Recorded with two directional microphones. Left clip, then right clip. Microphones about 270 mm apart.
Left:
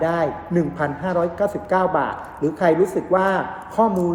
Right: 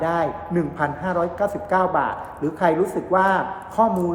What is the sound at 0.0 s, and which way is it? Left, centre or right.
A woman's voice, centre.